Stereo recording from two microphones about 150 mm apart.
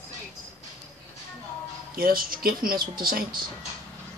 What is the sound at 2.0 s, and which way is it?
Speech, 75° right (ahead or behind).